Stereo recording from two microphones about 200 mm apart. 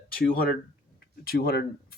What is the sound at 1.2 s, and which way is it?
Speech, 50° left (ahead or behind).